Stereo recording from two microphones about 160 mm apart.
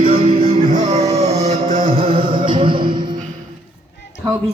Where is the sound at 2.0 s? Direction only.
30° right (ahead or behind).